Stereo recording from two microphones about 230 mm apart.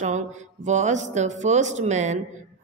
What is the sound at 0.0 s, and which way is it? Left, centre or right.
A woman's voice, right.